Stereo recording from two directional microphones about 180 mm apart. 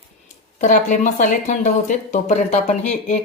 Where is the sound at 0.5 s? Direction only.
45° left (ahead or behind).